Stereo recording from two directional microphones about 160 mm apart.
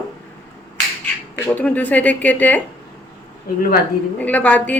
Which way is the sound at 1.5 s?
10° left (ahead or behind).